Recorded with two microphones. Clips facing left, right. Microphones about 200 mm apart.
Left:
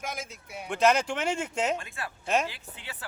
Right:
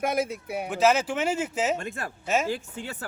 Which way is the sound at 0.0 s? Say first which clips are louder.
Right 12 dB; 60° right (ahead or behind).